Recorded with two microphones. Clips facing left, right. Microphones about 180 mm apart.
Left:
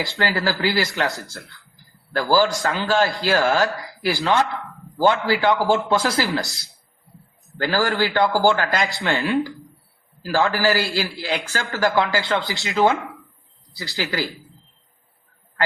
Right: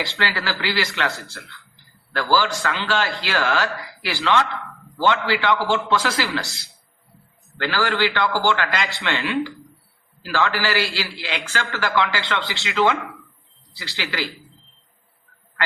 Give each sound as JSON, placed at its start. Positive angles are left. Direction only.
{"t": 0.0, "sound": "speech", "side_deg": 40}